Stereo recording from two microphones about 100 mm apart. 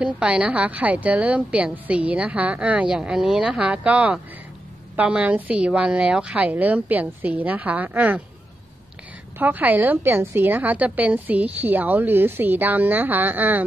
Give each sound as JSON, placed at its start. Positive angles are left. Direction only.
{"t": 0.0, "sound": "a woman's voice", "side_deg": -10}
{"t": 9.4, "sound": "a woman's voice", "side_deg": -15}